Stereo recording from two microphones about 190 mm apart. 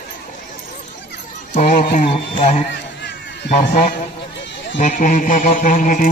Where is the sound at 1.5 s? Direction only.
40° left (ahead or behind).